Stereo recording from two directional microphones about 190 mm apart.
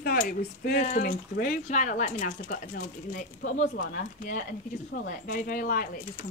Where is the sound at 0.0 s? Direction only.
50° left (ahead or behind).